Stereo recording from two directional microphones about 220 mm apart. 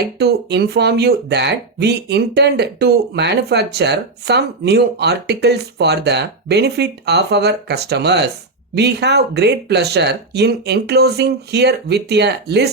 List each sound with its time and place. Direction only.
0.0 s speech: 50° right (ahead or behind)